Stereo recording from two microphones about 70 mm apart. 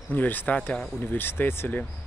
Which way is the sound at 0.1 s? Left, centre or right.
Left.